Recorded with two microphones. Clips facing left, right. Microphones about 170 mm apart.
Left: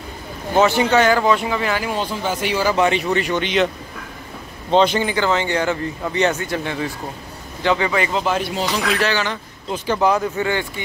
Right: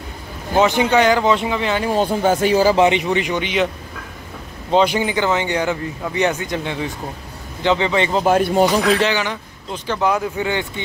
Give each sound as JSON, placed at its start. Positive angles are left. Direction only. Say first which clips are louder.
{"t": 0.6, "sound": "speech", "louder": "even", "side_deg": -15}
{"t": 2.0, "sound": "speech", "louder": "right 6 dB", "side_deg": -50}
{"t": 2.7, "sound": "speech", "louder": "right 3 dB", "side_deg": -20}
{"t": 4.6, "sound": "a man's voice", "louder": "even", "side_deg": -10}
{"t": 8.2, "sound": "speech", "louder": "right 7 dB", "side_deg": -50}
{"t": 9.0, "sound": "speech", "louder": "right 1 dB", "side_deg": -15}
{"t": 9.7, "sound": "speech", "louder": "left 2 dB", "side_deg": 5}
{"t": 10.3, "sound": "speech", "louder": "even", "side_deg": -20}